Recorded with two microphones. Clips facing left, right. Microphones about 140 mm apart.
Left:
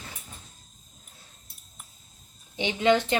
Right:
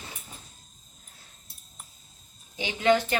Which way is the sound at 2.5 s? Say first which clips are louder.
Left 1 dB; 25° left (ahead or behind).